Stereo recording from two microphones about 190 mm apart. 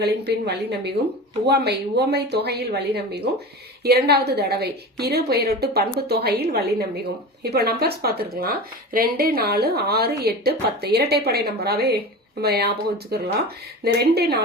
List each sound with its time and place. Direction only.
0.0 s speech: 60° right (ahead or behind)